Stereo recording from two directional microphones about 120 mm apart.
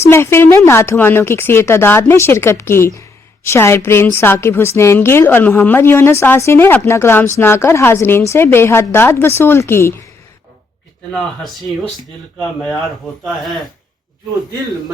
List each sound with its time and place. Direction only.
0.1 s speech: 20° left (ahead or behind)
11.1 s speech: centre (ahead or behind)
13.2 s speech: centre (ahead or behind)